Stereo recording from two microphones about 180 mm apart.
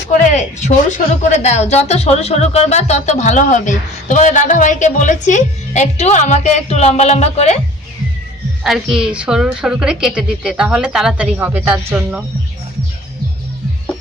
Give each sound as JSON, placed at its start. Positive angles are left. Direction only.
{"t": 0.2, "sound": "speech", "side_deg": 40}
{"t": 8.6, "sound": "a woman's voice", "side_deg": 0}